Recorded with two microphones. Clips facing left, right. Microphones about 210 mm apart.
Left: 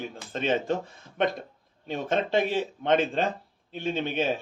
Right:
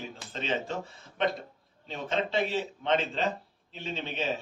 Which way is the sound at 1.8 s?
50° left (ahead or behind).